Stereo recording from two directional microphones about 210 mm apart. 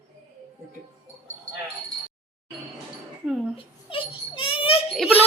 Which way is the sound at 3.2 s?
Centre (ahead or behind).